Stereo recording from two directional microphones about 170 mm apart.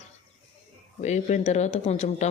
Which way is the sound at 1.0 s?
45° left (ahead or behind).